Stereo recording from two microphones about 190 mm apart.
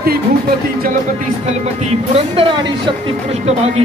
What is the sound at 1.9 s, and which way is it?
Music, 30° right (ahead or behind).